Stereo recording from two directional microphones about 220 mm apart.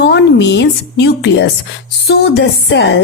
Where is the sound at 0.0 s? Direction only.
50° left (ahead or behind).